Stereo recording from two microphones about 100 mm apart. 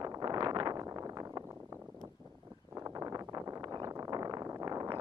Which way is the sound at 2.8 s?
35° right (ahead or behind).